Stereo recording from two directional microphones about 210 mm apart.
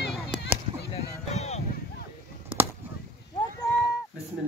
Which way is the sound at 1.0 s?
30° left (ahead or behind).